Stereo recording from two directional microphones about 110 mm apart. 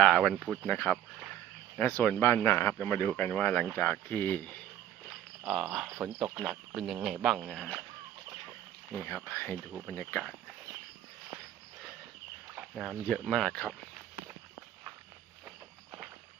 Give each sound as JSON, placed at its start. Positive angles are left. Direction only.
{"t": 0.0, "sound": "speech", "side_deg": 5}
{"t": 5.5, "sound": "speech", "side_deg": -5}
{"t": 9.0, "sound": "speech", "side_deg": 20}
{"t": 12.5, "sound": "speech", "side_deg": -5}